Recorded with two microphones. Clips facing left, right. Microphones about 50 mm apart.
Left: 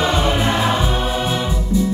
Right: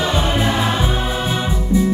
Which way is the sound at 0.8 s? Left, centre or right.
Centre.